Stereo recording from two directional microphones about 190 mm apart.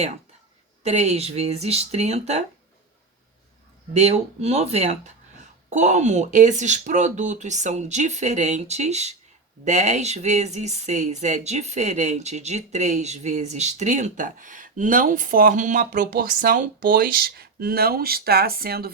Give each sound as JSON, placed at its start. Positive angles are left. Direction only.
{"t": 0.8, "sound": "speech", "side_deg": -35}
{"t": 3.9, "sound": "speech", "side_deg": -35}